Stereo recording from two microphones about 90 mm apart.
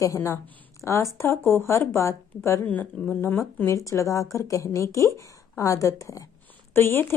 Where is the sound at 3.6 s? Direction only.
35° left (ahead or behind).